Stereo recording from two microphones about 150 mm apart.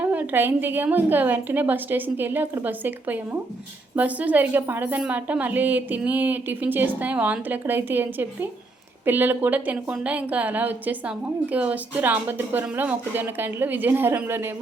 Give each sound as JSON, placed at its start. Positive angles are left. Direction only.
{"t": 0.0, "sound": "a woman's voice", "side_deg": -10}